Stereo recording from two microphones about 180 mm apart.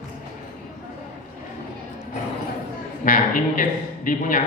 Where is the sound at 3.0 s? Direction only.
50° left (ahead or behind).